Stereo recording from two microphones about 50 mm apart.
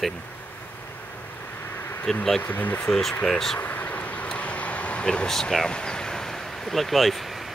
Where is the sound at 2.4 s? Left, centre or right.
Left.